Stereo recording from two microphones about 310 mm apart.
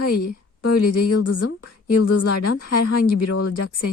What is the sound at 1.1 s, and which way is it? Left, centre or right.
Speech, left.